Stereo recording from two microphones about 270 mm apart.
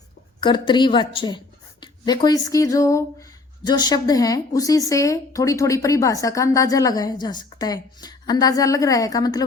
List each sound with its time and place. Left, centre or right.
0.3 s speech: centre